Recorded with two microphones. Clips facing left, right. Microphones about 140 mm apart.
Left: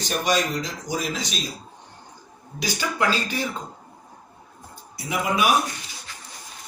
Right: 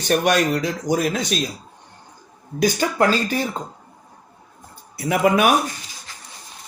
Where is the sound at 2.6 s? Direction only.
50° right (ahead or behind).